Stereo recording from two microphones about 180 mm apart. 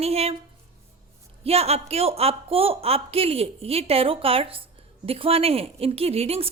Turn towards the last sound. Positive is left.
turn(degrees=-35)  # may be behind; listen again after turning